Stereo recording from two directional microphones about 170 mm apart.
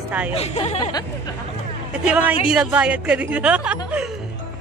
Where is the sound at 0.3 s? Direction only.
35° left (ahead or behind).